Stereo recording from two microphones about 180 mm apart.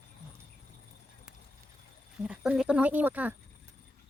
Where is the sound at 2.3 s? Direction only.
5° right (ahead or behind).